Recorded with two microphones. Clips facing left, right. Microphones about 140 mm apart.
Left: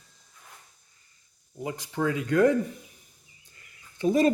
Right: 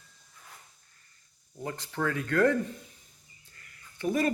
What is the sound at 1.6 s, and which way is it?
Speech, 15° left (ahead or behind).